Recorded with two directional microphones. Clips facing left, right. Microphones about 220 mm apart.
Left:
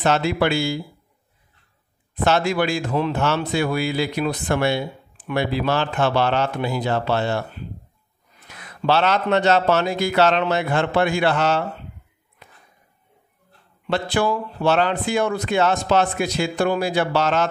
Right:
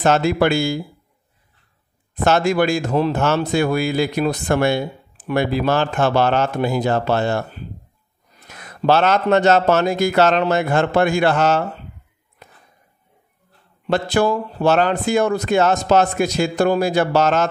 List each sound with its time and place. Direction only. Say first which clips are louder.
0.0 s speech: right 3 dB; 45° right (ahead or behind)
2.2 s speech: right 3 dB; 45° right (ahead or behind)
8.5 s speech: right 4 dB; 45° right (ahead or behind)
12.4 s a sound: right 3 dB; 45° right (ahead or behind)
13.8 s speech: right 4 dB; 45° right (ahead or behind)